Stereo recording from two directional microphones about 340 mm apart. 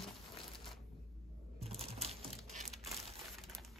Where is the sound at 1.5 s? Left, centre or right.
Centre.